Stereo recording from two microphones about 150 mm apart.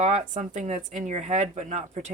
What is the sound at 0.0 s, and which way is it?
Speech, 50° right (ahead or behind).